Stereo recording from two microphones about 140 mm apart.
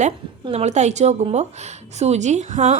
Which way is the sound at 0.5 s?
55° right (ahead or behind).